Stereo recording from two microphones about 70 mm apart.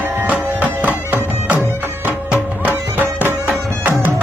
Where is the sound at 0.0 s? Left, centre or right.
Right.